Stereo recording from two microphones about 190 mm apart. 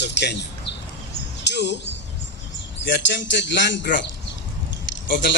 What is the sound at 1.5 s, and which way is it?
Speech, 65° left (ahead or behind).